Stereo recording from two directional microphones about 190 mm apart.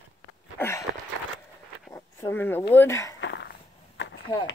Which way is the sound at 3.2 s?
70° left (ahead or behind).